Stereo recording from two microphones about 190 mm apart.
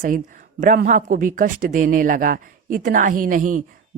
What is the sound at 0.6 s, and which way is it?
Speech, 45° right (ahead or behind).